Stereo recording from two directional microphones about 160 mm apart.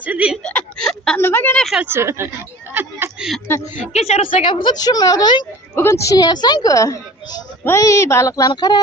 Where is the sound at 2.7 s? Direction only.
15° right (ahead or behind).